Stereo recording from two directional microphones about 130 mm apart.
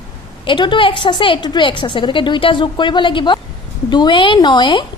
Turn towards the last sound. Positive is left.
turn(degrees=35)  # may be behind; listen again after turning